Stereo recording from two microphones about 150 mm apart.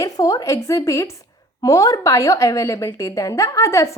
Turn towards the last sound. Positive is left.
turn(degrees=20)  # may be behind; listen again after turning